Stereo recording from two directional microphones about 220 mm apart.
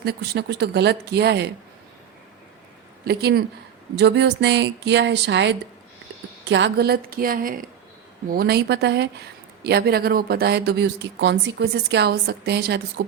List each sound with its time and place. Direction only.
0.0 s speech: 45° right (ahead or behind)
3.0 s a woman's voice: 45° right (ahead or behind)